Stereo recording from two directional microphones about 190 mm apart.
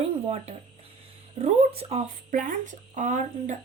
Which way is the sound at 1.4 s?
35° right (ahead or behind).